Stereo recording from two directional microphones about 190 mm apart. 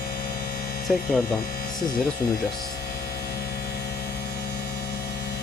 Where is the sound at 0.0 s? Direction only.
55° left (ahead or behind).